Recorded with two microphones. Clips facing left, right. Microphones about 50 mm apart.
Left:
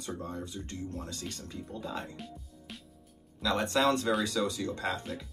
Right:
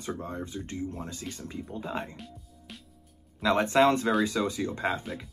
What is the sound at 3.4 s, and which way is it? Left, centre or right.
Speech, right.